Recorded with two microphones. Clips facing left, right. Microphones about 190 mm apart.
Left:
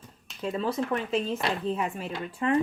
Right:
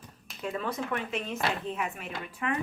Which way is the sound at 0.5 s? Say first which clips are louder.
Left 5 dB; 30° left (ahead or behind).